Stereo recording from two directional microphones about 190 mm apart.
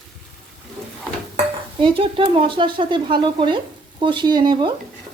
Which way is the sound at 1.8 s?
25° right (ahead or behind).